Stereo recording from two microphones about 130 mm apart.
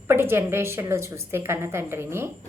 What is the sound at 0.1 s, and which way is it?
A woman's voice, 20° right (ahead or behind).